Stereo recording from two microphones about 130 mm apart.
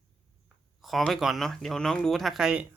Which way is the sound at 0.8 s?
Centre (ahead or behind).